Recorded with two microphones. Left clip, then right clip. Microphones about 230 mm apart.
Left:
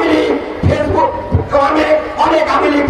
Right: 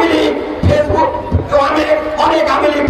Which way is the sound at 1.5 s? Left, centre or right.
Right.